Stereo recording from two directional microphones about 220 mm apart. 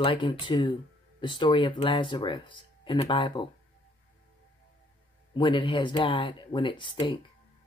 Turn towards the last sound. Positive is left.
turn(degrees=20)  # may be behind; listen again after turning